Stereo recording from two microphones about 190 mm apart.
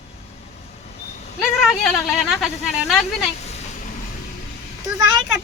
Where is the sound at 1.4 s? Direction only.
Centre (ahead or behind).